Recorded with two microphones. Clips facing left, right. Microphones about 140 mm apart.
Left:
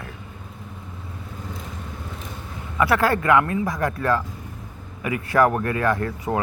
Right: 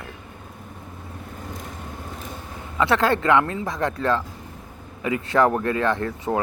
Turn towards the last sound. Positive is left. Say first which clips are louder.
# even
turn(degrees=-25)  # may be behind; listen again after turning